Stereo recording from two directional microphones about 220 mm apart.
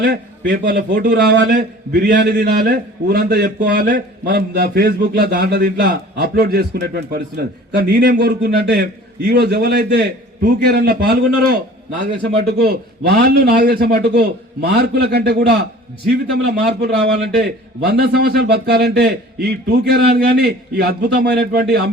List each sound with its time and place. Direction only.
0.0 s a man's voice: 50° right (ahead or behind)